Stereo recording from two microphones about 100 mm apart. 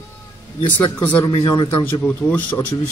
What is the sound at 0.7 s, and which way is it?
Speech, 15° left (ahead or behind).